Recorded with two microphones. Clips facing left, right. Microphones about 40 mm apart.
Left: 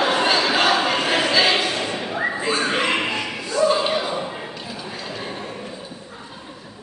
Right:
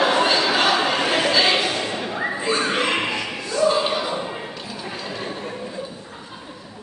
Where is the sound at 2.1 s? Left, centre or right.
Centre.